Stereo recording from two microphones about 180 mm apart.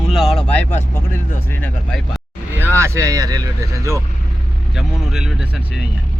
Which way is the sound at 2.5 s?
15° right (ahead or behind).